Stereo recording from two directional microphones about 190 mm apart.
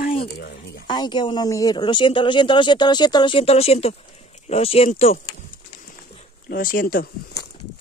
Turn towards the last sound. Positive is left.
turn(degrees=50)  # may be behind; listen again after turning